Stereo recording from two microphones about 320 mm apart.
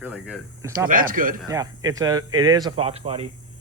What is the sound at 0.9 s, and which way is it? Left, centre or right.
Speech, right.